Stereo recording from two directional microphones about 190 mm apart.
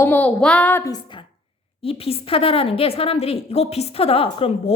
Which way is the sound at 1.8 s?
30° left (ahead or behind).